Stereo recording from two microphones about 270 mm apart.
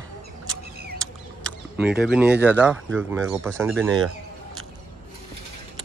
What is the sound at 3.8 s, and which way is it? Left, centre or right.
Speech, right.